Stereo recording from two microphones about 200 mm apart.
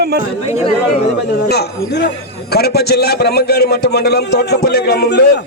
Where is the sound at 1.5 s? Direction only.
55° left (ahead or behind).